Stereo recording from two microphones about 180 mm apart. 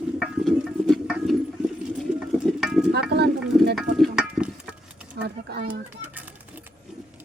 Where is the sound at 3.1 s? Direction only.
65° right (ahead or behind).